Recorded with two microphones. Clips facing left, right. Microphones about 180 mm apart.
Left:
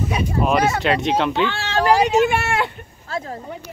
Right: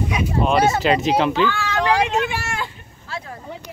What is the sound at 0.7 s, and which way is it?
Speech, centre (ahead or behind).